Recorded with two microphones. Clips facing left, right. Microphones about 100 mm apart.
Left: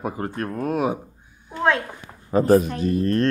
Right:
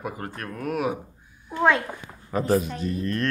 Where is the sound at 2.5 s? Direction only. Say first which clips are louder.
Left 6 dB; 50° left (ahead or behind).